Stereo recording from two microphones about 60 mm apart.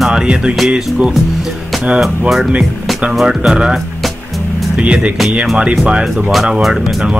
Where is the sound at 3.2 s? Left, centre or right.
Centre.